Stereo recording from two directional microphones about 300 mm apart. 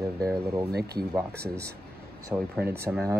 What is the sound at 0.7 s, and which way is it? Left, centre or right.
Speech, right.